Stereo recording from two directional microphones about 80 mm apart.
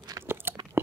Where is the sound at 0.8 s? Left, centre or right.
Right.